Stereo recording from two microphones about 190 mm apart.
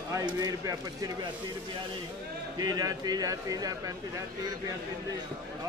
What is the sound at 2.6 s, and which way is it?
A man's voice, 20° right (ahead or behind).